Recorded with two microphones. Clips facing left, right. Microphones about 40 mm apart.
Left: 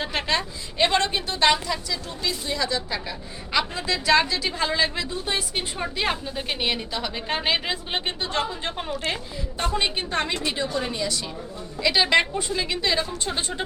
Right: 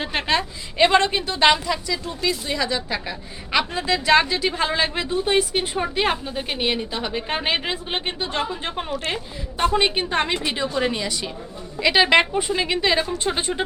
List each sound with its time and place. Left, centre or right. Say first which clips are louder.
0.0 s a woman's voice: right 3 dB; centre
5.4 s a woman's voice: right 7 dB; centre
9.7 s a woman's voice: right 3 dB; right
10.8 s a woman's voice: right 5 dB; right
11.0 s a woman's voice: right 1 dB; centre